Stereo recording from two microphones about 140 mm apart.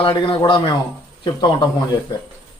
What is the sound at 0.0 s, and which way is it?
A man's voice, 35° left (ahead or behind).